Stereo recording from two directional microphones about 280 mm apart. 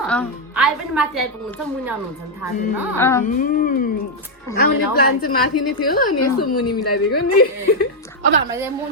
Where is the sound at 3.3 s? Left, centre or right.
Left.